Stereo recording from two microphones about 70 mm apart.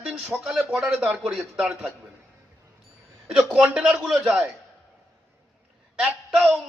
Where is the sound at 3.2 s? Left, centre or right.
Centre.